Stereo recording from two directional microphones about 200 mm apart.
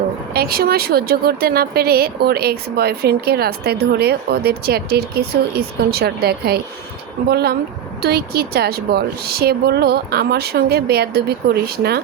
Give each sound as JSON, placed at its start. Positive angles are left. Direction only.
{"t": 0.3, "sound": "speech", "side_deg": -50}